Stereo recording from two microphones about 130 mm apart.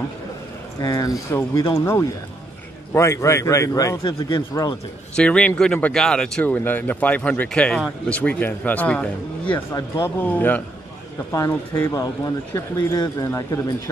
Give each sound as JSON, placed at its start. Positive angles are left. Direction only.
{"t": 0.7, "sound": "speech", "side_deg": 25}
{"t": 5.1, "sound": "speech", "side_deg": 10}
{"t": 9.8, "sound": "speech", "side_deg": 20}
{"t": 11.3, "sound": "speech", "side_deg": 25}